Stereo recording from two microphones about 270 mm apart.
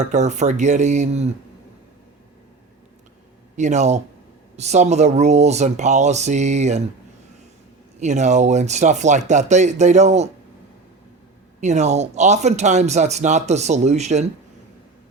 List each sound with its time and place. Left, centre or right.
0.0 s speech: right
3.6 s speech: right
8.0 s speech: right
11.6 s speech: right